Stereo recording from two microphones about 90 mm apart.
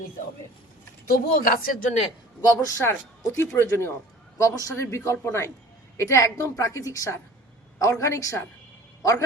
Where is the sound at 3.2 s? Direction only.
30° left (ahead or behind).